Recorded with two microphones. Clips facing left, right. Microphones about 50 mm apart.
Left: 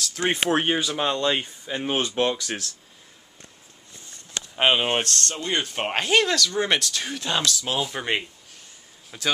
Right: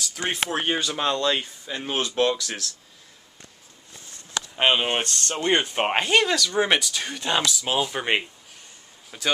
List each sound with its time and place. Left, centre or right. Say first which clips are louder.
0.2 s speech: left 4 dB; centre
0.7 s speech: left 1 dB; centre
1.2 s speech: even; left
4.6 s speech: left 1 dB; centre
5.3 s speech: right 9 dB; right
5.6 s speech: right 3 dB; centre
6.0 s speech: even; centre
9.1 s speech: even; centre